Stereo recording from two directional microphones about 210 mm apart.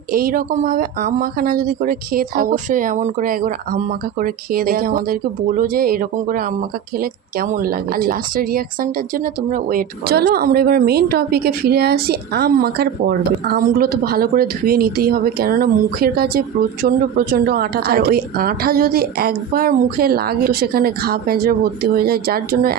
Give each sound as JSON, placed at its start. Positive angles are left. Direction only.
{"t": 0.1, "sound": "speech", "side_deg": -45}